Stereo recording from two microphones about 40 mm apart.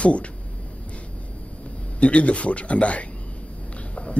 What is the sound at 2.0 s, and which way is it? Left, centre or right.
A man's voice, left.